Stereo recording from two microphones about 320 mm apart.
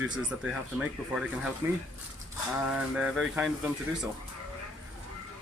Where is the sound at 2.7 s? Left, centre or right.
Centre.